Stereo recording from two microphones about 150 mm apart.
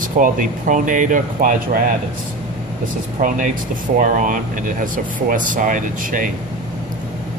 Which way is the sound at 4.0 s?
65° right (ahead or behind).